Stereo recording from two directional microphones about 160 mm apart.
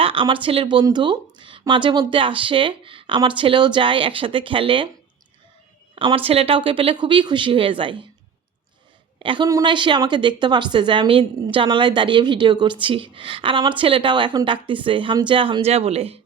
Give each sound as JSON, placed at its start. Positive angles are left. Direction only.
{"t": 0.0, "sound": "speech", "side_deg": -35}
{"t": 5.9, "sound": "speech", "side_deg": -35}
{"t": 9.1, "sound": "a woman's voice", "side_deg": -30}